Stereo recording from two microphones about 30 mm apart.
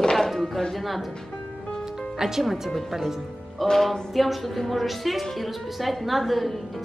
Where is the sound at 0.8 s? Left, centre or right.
Centre.